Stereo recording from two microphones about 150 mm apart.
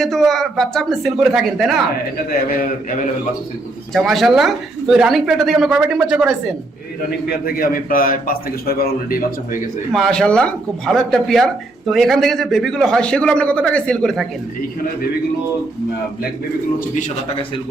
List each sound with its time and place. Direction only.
0.0 s speech: centre (ahead or behind)
2.1 s a man's voice: 70° left (ahead or behind)
3.9 s speech: centre (ahead or behind)
7.3 s a man's voice: 80° left
9.9 s speech: 5° left (ahead or behind)